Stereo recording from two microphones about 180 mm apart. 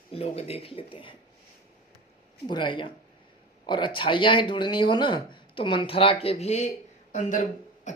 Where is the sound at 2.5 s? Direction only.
25° left (ahead or behind).